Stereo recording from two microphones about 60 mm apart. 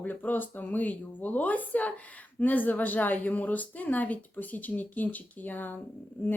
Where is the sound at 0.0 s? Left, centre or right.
Left.